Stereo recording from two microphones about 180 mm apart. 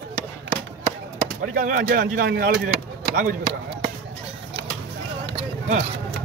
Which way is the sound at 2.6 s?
50° right (ahead or behind).